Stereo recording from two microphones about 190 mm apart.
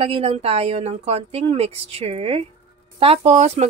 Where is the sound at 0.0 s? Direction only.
30° right (ahead or behind).